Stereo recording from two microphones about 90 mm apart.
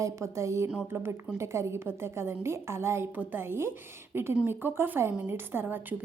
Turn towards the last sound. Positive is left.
turn(degrees=-25)  # may be behind; listen again after turning